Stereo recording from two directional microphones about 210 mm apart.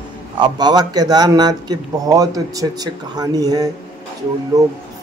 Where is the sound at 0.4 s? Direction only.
20° right (ahead or behind).